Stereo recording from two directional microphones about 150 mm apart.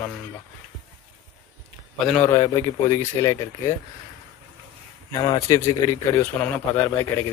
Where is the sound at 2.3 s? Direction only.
25° left (ahead or behind).